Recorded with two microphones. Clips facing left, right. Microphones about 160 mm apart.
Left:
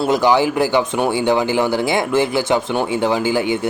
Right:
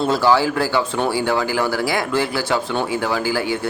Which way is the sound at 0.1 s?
20° left (ahead or behind).